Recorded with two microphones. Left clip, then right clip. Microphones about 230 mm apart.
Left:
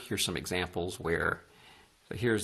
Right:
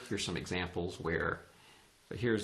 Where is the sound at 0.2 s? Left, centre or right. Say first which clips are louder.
Left 6 dB; left.